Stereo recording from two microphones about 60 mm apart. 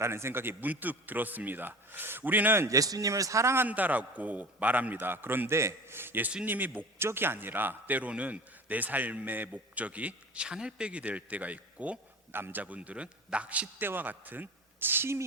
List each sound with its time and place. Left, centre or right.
0.0 s a man's voice: right
2.6 s speech: right
3.7 s a man's voice: right
12.3 s a man's voice: right
13.8 s a man's voice: right